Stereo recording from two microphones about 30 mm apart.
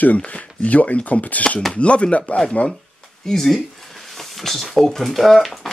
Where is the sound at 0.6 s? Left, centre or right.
Left.